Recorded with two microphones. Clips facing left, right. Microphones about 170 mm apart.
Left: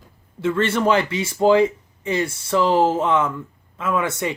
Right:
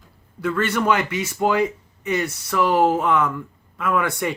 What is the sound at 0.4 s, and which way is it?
Speech, 25° left (ahead or behind).